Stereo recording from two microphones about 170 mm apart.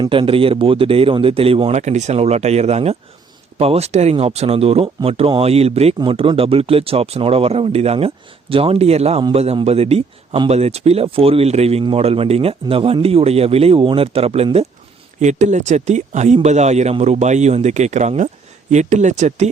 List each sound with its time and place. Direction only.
0.0 s a man's voice: 30° right (ahead or behind)